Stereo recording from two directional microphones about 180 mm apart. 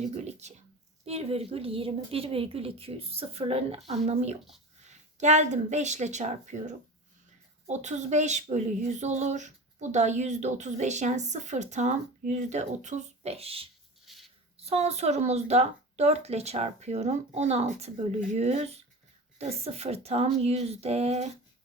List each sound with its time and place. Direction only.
0.1 s a woman's voice: 40° right (ahead or behind)
14.1 s a sound: centre (ahead or behind)
14.6 s a woman's voice: 35° right (ahead or behind)